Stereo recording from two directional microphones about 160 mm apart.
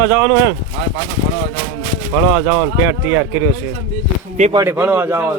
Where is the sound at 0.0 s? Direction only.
10° right (ahead or behind).